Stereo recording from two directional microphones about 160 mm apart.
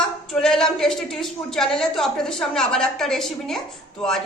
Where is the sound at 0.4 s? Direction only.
5° left (ahead or behind).